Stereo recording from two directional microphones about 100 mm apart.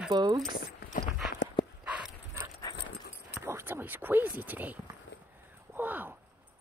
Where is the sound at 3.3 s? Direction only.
25° right (ahead or behind).